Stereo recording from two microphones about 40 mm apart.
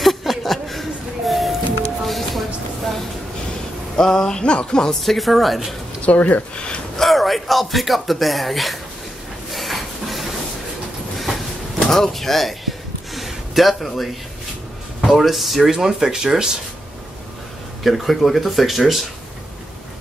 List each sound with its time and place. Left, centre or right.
0.0 s a sound: centre
3.9 s speech: centre
5.0 s speech: centre
6.0 s speech: left
6.5 s speech: left
7.0 s speech: centre
9.5 s a sound: centre
11.9 s speech: centre
13.1 s a sound: centre
15.0 s speech: centre
17.8 s speech: centre